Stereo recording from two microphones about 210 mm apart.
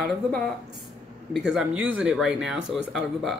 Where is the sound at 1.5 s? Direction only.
5° right (ahead or behind).